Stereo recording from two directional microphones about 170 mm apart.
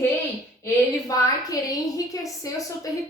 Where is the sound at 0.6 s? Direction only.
20° left (ahead or behind).